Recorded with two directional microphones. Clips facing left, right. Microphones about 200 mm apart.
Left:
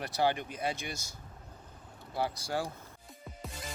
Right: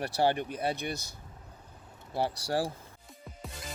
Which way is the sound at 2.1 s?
30° right (ahead or behind).